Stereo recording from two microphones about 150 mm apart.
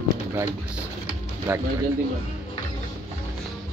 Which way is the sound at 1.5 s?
15° right (ahead or behind).